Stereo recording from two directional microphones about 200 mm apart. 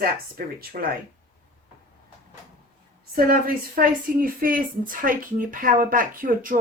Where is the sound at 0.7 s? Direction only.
45° right (ahead or behind).